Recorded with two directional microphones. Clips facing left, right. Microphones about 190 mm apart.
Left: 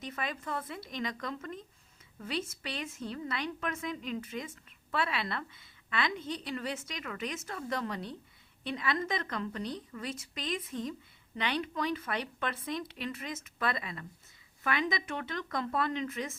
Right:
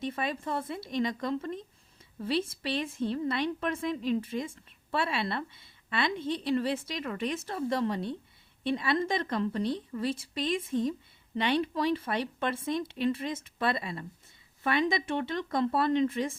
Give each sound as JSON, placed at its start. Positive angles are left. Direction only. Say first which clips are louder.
{"t": 0.1, "sound": "a woman's voice", "louder": "right 4 dB", "side_deg": -30}